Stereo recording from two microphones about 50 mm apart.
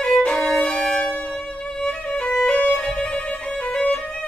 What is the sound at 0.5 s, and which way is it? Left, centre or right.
Violin, left.